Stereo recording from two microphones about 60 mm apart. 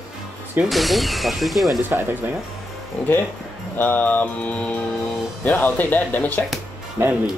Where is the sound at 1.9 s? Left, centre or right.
Right.